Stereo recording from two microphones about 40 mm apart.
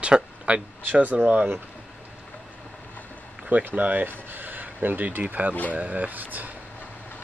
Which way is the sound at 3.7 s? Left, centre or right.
Right.